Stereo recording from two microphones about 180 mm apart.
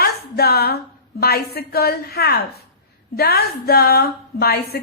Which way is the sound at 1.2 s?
60° left (ahead or behind).